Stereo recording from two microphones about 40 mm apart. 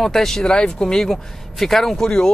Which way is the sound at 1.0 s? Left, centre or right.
Centre.